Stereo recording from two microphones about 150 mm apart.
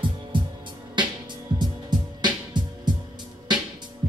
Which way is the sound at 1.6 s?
30° right (ahead or behind).